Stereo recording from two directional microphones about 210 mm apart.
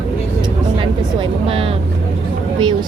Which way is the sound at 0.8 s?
25° right (ahead or behind).